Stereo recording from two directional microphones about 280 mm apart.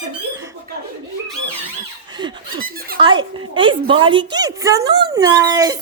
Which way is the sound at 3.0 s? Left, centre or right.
Centre.